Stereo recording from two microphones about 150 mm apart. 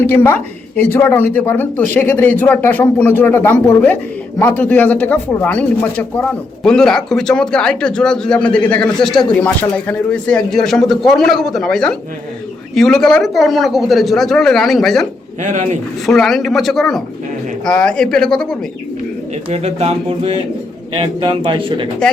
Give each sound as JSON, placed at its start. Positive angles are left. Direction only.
{"t": 0.1, "sound": "speech", "side_deg": 15}
{"t": 15.4, "sound": "speech", "side_deg": -55}
{"t": 16.0, "sound": "speech", "side_deg": 0}
{"t": 19.5, "sound": "speech", "side_deg": -45}